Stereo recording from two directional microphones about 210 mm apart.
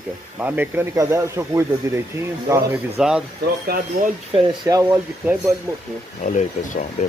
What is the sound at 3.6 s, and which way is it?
Speech, 45° right (ahead or behind).